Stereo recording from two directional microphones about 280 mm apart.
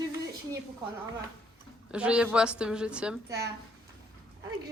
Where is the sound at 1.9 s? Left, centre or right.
Centre.